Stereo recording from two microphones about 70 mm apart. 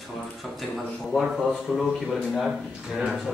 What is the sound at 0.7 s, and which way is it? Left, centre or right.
Speech, centre.